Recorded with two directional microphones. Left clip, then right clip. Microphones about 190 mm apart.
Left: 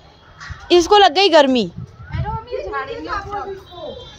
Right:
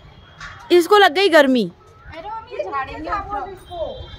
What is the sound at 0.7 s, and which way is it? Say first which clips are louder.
A woman's voice: left 1 dB; 5° right (ahead or behind).